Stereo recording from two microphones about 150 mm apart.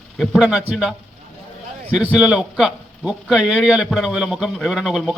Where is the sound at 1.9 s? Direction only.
10° right (ahead or behind).